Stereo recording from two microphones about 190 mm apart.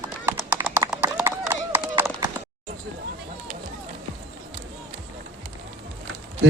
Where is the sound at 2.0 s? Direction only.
15° right (ahead or behind).